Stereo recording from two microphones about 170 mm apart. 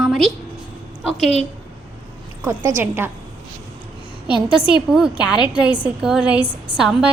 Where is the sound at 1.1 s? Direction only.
40° left (ahead or behind).